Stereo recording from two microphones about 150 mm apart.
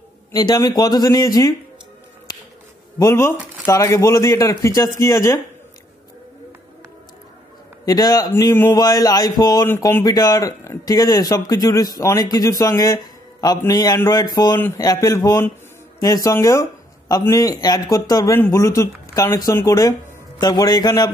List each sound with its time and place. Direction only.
0.3 s speech: 25° left (ahead or behind)
3.0 s speech: 20° left (ahead or behind)
7.8 s speech: 25° left (ahead or behind)
8.3 s speech: 15° left (ahead or behind)